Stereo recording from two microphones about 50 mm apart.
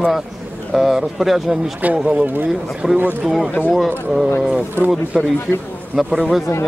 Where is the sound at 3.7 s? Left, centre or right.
Centre.